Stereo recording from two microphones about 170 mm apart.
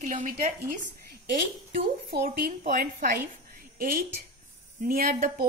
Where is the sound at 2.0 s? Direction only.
60° right (ahead or behind).